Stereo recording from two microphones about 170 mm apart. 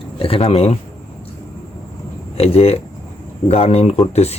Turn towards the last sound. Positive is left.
turn(degrees=40)  # may be behind; listen again after turning